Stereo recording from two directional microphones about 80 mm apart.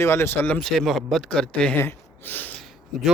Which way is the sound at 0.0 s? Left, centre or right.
Left.